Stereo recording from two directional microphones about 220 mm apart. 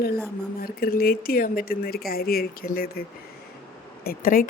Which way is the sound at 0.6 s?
45° left (ahead or behind).